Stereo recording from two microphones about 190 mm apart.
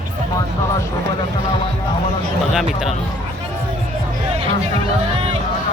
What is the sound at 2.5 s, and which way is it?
Speech, centre (ahead or behind).